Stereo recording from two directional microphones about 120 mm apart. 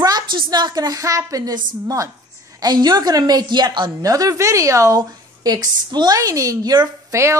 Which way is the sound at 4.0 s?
30° right (ahead or behind).